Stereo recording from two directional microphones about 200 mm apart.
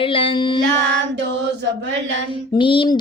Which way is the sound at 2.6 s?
25° left (ahead or behind).